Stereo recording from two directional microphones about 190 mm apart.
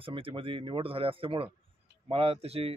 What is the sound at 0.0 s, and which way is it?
Speech, 30° right (ahead or behind).